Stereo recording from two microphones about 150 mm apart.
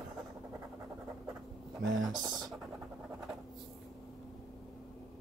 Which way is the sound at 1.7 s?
Centre (ahead or behind).